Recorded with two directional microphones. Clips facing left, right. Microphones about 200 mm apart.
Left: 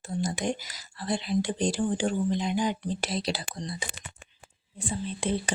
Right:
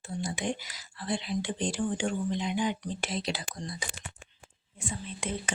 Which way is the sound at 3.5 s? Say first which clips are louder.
Left 3 dB; 25° left (ahead or behind).